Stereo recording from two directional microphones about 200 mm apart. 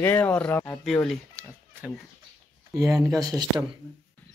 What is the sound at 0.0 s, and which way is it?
Speech, 10° left (ahead or behind).